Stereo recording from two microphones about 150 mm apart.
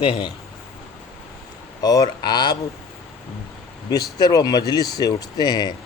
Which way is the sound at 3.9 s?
25° left (ahead or behind).